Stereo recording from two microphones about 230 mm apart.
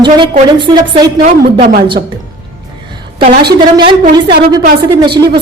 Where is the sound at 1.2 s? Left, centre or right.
Right.